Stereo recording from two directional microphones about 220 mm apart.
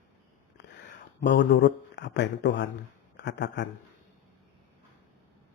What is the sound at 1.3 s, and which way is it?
Speech, 50° left (ahead or behind).